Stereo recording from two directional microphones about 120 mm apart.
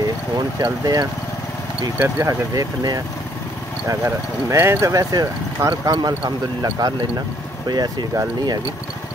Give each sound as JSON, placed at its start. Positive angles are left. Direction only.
{"t": 0.6, "sound": "speech", "side_deg": -30}
{"t": 2.0, "sound": "speech", "side_deg": -20}
{"t": 2.5, "sound": "speech", "side_deg": -30}